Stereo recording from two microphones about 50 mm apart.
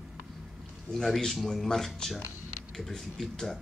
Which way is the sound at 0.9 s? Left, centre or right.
Centre.